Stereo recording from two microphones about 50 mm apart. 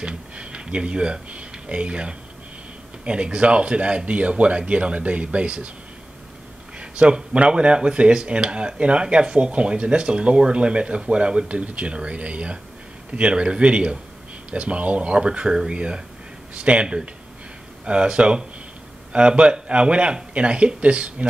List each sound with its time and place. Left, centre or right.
0.0 s speech: right
6.8 s speech: right